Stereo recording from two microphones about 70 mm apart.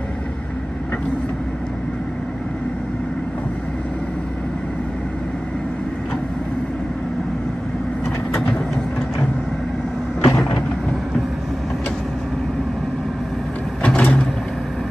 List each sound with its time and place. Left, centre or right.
10.2 s vehicle: left
13.8 s vehicle: centre